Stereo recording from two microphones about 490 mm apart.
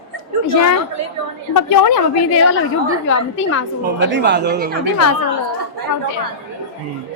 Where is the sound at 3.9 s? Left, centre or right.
Right.